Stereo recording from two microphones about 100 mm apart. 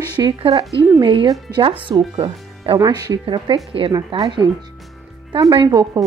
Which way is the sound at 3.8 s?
65° right (ahead or behind).